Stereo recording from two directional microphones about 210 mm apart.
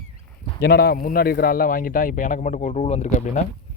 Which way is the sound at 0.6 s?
50° left (ahead or behind).